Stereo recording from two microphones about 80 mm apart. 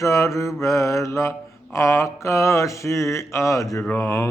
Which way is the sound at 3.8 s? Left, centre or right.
Left.